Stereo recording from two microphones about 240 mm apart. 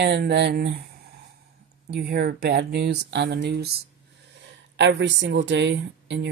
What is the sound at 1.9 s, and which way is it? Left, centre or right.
Speech, right.